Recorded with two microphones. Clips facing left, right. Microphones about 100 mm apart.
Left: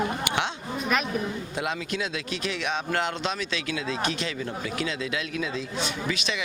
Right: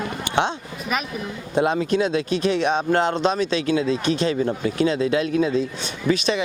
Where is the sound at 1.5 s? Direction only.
35° right (ahead or behind).